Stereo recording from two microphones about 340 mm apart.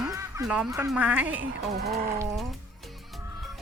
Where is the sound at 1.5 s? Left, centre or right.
Right.